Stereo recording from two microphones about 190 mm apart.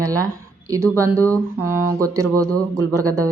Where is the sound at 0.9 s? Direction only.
15° right (ahead or behind).